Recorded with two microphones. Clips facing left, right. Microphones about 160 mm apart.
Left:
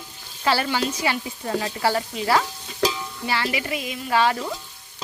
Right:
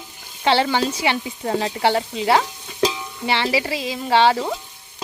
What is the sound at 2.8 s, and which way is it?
Music, 20° right (ahead or behind).